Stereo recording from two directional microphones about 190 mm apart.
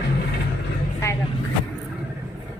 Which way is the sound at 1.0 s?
15° left (ahead or behind).